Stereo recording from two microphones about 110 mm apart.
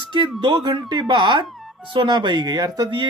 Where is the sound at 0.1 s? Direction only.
45° right (ahead or behind).